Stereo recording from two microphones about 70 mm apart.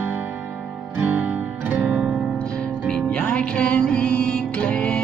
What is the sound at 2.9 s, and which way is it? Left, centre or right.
Music, centre.